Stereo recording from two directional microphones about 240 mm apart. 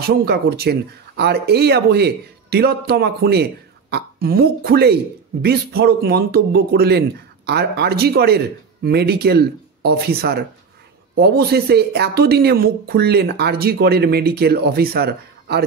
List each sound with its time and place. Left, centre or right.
0.0 s speech: right